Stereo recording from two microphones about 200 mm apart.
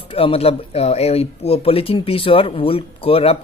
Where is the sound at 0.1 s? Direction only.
30° left (ahead or behind).